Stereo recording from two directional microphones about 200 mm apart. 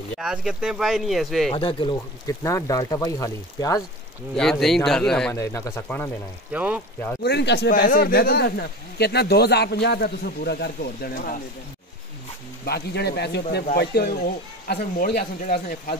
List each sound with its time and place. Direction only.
0.2 s speech: 5° right (ahead or behind)
1.5 s speech: 25° left (ahead or behind)
4.4 s speech: centre (ahead or behind)
5.3 s speech: 15° left (ahead or behind)
6.5 s speech: 10° right (ahead or behind)
7.2 s speech: 55° left (ahead or behind)
12.6 s speech: 55° left (ahead or behind)
15.4 s speech: 50° left (ahead or behind)